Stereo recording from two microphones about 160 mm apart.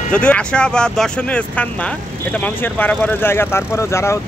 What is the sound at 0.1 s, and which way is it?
Speech, 5° left (ahead or behind).